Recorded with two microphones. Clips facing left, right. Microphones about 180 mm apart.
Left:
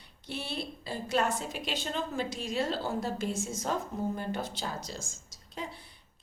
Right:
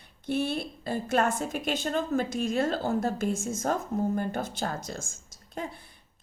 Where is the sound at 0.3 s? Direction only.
50° right (ahead or behind).